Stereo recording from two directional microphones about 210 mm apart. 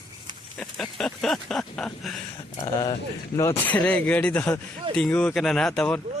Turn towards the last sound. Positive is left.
turn(degrees=5)  # may be behind; listen again after turning